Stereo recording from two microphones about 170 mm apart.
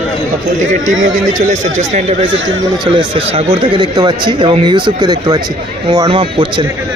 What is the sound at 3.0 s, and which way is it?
Speech, 30° right (ahead or behind).